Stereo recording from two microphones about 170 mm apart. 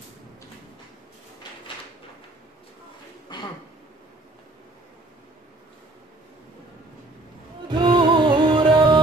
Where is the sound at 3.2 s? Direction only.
25° left (ahead or behind).